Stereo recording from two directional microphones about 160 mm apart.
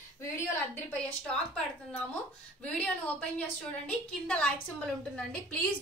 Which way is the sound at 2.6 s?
5° left (ahead or behind).